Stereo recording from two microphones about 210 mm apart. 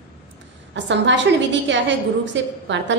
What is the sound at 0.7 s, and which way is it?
A woman's voice, 60° right (ahead or behind).